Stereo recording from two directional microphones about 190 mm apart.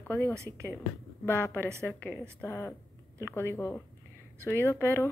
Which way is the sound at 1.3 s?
15° left (ahead or behind).